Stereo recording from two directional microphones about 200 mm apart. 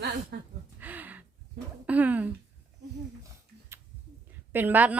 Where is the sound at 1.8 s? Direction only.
10° right (ahead or behind).